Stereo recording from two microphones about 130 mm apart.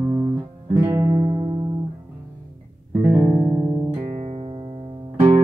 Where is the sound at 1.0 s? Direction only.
30° right (ahead or behind).